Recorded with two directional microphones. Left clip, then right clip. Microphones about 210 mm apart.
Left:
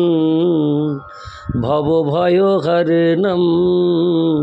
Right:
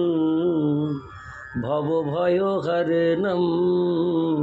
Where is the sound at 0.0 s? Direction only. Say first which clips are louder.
Left 7 dB; 40° left (ahead or behind).